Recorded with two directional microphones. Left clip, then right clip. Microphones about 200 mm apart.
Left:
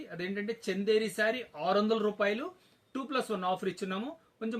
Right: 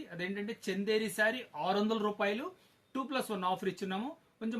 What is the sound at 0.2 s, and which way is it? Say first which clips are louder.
Speech: left 3 dB; 20° right (ahead or behind).